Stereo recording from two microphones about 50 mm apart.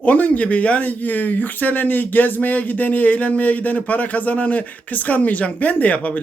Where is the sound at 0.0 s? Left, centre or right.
Left.